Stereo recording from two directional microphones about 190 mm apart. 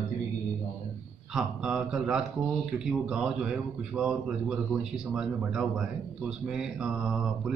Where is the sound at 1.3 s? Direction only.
5° right (ahead or behind).